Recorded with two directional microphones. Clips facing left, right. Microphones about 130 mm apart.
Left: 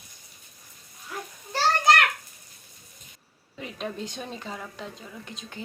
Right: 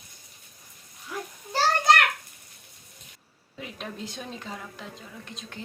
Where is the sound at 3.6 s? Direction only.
Centre (ahead or behind).